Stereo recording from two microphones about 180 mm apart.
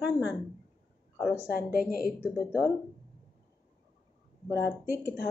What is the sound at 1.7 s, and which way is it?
Speech, 55° left (ahead or behind).